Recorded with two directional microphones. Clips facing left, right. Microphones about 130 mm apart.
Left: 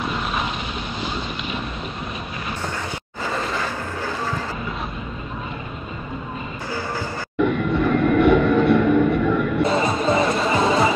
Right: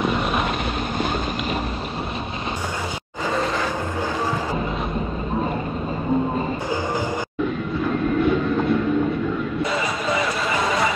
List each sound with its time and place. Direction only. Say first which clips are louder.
3.3 s vehicle: right 3 dB; centre (ahead or behind)
7.3 s train: left 8 dB; 70° left (ahead or behind)
9.7 s crowd: left 4 dB; 30° left (ahead or behind)
10.5 s a sound: left 3 dB; 25° left (ahead or behind)